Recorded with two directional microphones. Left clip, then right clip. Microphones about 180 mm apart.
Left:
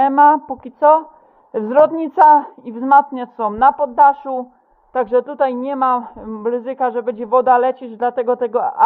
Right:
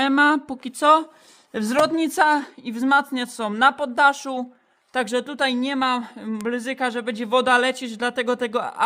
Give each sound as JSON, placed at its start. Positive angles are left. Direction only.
{"t": 0.0, "sound": "a woman's voice", "side_deg": -15}